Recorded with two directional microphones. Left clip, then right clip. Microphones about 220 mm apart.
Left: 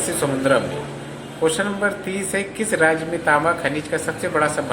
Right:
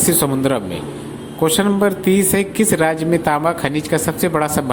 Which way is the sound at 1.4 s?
45° right (ahead or behind).